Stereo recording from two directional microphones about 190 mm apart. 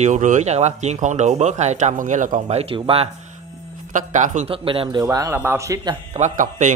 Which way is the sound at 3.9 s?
40° right (ahead or behind).